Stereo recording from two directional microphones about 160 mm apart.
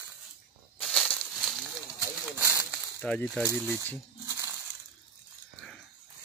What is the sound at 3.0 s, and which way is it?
Speech, 5° left (ahead or behind).